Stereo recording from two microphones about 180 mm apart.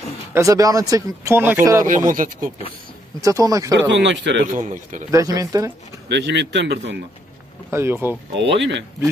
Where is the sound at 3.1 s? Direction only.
20° right (ahead or behind).